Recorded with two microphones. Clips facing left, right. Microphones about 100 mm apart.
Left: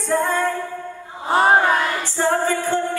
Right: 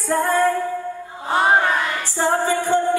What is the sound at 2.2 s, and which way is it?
Music, 15° right (ahead or behind).